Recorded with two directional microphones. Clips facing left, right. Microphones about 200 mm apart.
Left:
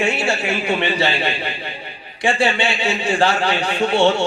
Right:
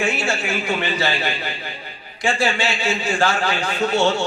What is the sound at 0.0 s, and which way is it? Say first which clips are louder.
A man's voice: left 2 dB; 25° left (ahead or behind).